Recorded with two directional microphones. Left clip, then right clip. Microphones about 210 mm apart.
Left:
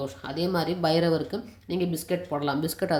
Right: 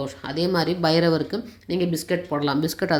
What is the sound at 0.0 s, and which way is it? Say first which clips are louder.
Speech: right 4 dB; 5° right (ahead or behind).